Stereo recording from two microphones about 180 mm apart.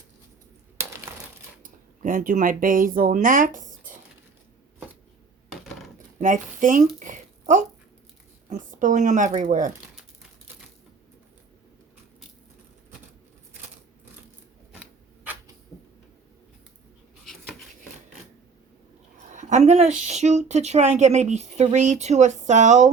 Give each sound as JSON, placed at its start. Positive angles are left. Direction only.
{"t": 1.6, "sound": "speech", "side_deg": -50}
{"t": 5.5, "sound": "coin", "side_deg": 0}
{"t": 6.1, "sound": "speech", "side_deg": -45}
{"t": 19.3, "sound": "a sound", "side_deg": -40}
{"t": 20.1, "sound": "speech", "side_deg": -40}